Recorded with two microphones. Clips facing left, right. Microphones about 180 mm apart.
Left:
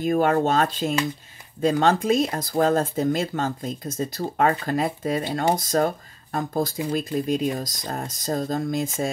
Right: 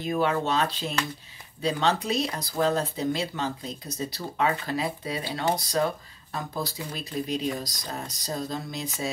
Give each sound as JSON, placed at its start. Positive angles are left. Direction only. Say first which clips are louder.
{"t": 0.0, "sound": "speech", "louder": "left 6 dB", "side_deg": 50}